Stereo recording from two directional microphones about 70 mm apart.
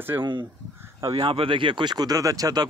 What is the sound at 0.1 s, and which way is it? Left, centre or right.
Speech, right.